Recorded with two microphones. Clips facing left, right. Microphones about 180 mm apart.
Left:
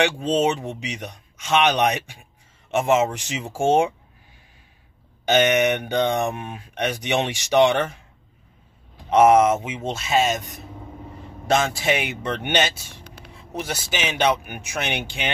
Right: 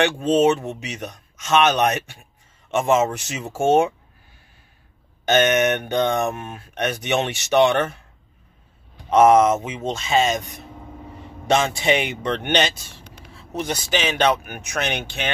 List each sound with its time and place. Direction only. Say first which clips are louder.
0.0 s speech: right 3 dB; 10° left (ahead or behind)
5.2 s speech: right 1 dB; 10° left (ahead or behind)
9.1 s speech: right 1 dB; 10° left (ahead or behind)